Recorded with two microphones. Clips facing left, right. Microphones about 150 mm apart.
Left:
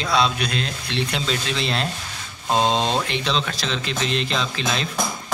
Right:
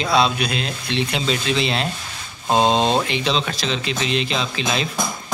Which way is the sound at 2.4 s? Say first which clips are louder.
Right 3 dB; 15° right (ahead or behind).